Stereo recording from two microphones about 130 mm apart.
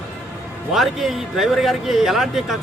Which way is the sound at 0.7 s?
Centre (ahead or behind).